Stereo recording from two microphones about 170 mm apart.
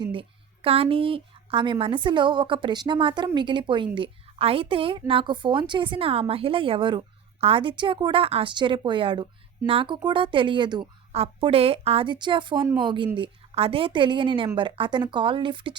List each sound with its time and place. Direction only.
0.0 s a woman's voice: 30° right (ahead or behind)